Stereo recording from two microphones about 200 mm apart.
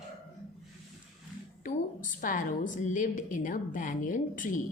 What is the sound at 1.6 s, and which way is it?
A woman's voice, 45° left (ahead or behind).